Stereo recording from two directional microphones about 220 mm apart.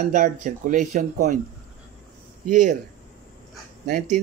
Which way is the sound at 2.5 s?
35° right (ahead or behind).